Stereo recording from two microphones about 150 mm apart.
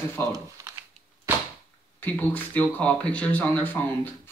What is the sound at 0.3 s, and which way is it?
Speech, 20° right (ahead or behind).